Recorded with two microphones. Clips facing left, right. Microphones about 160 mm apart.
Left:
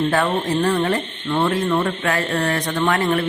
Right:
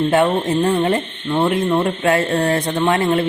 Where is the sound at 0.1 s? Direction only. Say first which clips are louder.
Right 4 dB; 20° right (ahead or behind).